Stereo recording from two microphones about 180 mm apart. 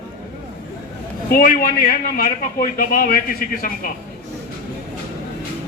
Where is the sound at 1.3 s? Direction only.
55° left (ahead or behind).